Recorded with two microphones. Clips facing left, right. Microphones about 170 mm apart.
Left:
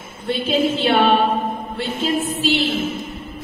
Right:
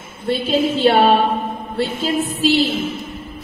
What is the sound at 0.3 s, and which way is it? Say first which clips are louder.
Music: right 1 dB; 40° right (ahead or behind).